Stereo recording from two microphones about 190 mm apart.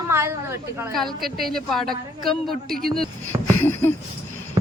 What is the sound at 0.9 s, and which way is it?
Speech, centre (ahead or behind).